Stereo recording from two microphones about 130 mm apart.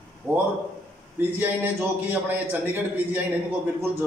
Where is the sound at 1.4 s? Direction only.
15° right (ahead or behind).